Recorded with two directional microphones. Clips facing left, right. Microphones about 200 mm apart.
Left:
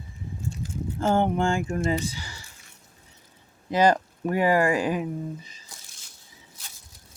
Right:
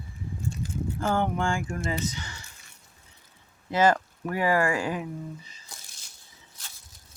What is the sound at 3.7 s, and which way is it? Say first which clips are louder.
Speech: left 2 dB; 15° left (ahead or behind).